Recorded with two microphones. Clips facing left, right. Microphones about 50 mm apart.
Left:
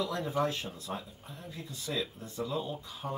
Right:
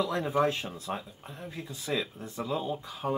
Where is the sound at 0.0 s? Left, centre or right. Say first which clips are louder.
Right 4 dB; right.